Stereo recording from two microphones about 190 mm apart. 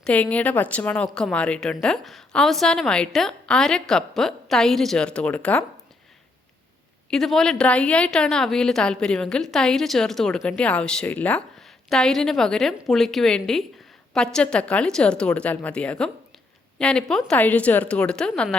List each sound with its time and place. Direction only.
0.0 s a woman's voice: 5° left (ahead or behind)
7.1 s a woman's voice: centre (ahead or behind)